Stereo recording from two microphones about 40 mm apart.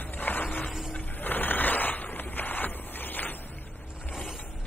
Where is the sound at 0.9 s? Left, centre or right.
Left.